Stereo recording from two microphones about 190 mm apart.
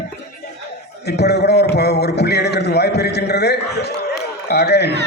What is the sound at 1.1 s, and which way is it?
A man's voice, 60° left (ahead or behind).